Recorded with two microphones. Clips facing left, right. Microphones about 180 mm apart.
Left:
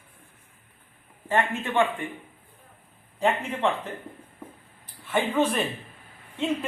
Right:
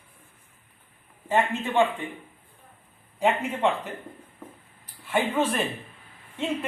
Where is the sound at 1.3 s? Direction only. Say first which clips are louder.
Right 1 dB; 20° right (ahead or behind).